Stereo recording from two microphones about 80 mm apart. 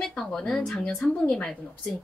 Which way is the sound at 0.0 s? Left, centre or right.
Centre.